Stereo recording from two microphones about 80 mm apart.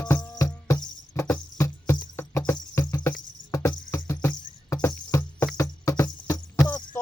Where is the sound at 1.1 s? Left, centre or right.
Left.